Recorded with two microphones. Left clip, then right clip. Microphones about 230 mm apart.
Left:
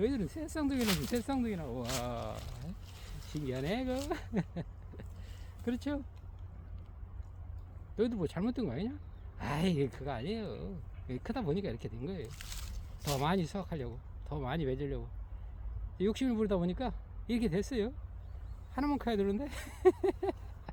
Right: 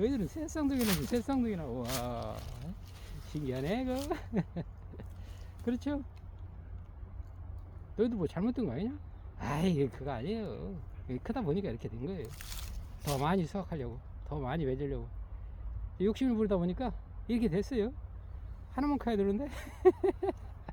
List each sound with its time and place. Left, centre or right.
0.0 s speech: centre
7.9 s speech: centre